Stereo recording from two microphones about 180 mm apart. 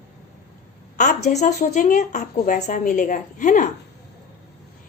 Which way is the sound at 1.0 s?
40° left (ahead or behind).